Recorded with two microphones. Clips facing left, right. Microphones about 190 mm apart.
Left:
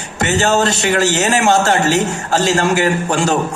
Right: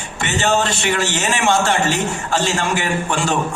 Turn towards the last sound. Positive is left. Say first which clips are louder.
# left 4 dB
turn(degrees=40)  # may be behind; listen again after turning